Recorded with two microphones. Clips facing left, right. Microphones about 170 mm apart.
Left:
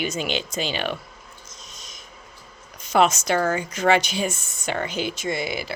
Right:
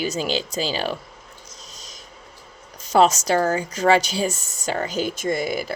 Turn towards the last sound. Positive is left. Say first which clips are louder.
# right 3 dB
turn(degrees=-45)  # may be behind; listen again after turning